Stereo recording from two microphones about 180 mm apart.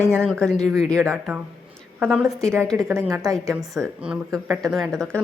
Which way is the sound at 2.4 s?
15° right (ahead or behind).